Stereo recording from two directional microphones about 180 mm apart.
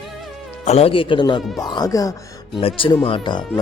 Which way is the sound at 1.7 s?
20° left (ahead or behind).